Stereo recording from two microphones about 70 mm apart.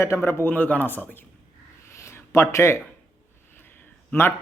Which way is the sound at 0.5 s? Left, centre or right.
Left.